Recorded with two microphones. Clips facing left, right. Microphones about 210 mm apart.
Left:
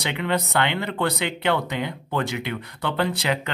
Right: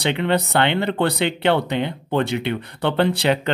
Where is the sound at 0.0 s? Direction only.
30° right (ahead or behind).